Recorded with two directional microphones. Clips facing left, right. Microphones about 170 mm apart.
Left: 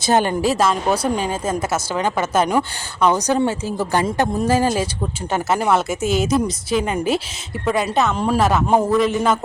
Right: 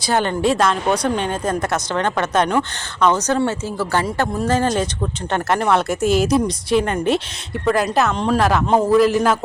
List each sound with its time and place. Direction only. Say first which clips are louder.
0.0 s speech: left 2 dB; 15° left (ahead or behind)
0.4 s speech: right 1 dB; 5° left (ahead or behind)